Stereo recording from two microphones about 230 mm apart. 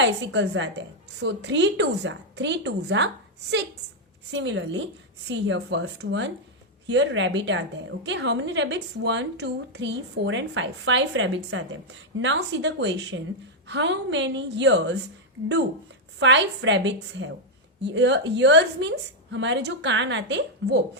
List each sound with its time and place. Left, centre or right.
0.0 s a woman's voice: right
4.3 s a woman's voice: right
16.2 s a woman's voice: right